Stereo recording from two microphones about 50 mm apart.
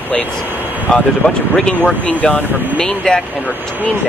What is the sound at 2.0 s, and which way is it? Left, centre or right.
Speech, left.